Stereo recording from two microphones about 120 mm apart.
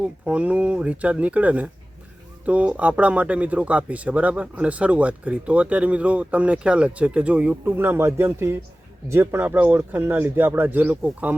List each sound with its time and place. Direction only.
0.0 s speech: 10° right (ahead or behind)